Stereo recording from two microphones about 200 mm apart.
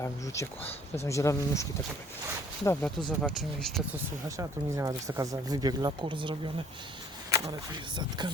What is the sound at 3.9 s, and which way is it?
Speech, 15° right (ahead or behind).